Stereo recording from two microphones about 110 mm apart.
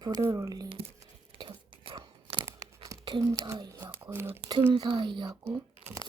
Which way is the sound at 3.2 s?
30° right (ahead or behind).